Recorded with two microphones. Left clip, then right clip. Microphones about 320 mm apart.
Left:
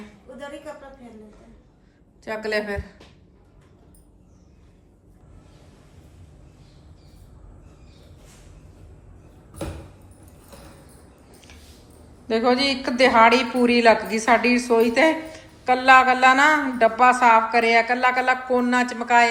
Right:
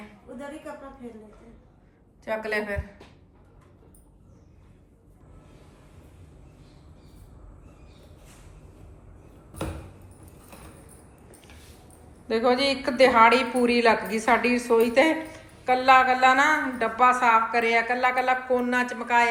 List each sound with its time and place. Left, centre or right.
0.3 s a woman's voice: centre
2.2 s a woman's voice: centre
12.3 s a woman's voice: centre